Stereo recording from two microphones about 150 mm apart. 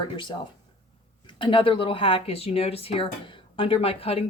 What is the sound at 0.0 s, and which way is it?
Speech, 30° left (ahead or behind).